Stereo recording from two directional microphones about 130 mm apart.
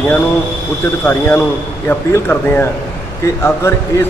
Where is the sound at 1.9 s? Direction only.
15° left (ahead or behind).